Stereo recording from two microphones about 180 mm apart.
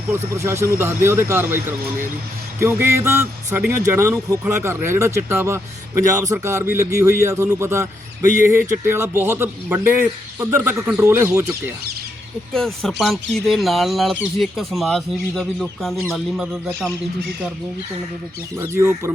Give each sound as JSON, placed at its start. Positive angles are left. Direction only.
{"t": 0.3, "sound": "speech", "side_deg": -15}
{"t": 12.5, "sound": "speech", "side_deg": 0}
{"t": 18.5, "sound": "speech", "side_deg": -15}